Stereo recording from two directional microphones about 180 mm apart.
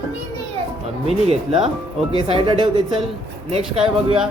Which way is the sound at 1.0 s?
35° right (ahead or behind).